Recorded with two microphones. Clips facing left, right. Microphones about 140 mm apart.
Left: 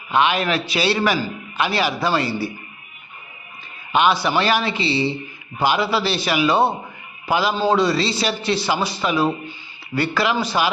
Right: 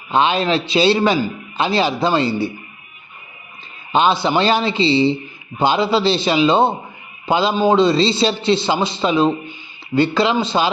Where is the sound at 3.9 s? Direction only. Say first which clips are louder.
Right 2 dB; 25° right (ahead or behind).